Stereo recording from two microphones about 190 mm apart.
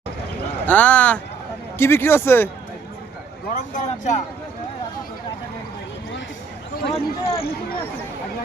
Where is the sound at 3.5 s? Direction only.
40° left (ahead or behind).